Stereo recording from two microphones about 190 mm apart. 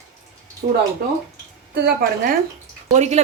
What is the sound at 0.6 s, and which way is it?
Speech, 40° right (ahead or behind).